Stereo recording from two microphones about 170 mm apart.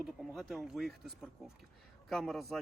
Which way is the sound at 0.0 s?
Centre (ahead or behind).